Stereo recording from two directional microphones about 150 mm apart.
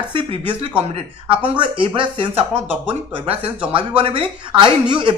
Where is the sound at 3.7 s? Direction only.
35° right (ahead or behind).